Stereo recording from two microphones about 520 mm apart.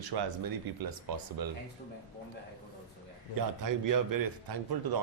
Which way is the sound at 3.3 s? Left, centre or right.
Right.